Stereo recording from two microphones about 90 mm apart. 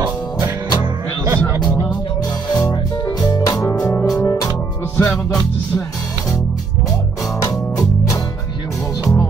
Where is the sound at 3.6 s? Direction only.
35° left (ahead or behind).